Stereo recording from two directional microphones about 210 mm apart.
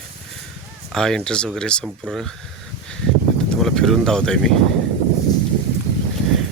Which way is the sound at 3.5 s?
Centre (ahead or behind).